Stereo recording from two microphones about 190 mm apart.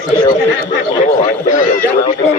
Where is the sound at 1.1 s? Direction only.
40° left (ahead or behind).